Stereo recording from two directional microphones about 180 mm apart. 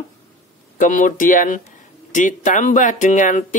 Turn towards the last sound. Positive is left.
turn(degrees=45)  # may be behind; listen again after turning